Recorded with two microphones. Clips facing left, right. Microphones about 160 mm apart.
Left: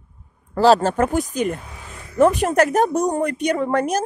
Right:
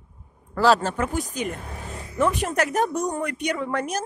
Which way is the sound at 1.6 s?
45° right (ahead or behind).